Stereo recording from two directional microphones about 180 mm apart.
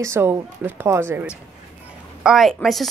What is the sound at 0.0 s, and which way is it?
A woman's voice, 15° right (ahead or behind).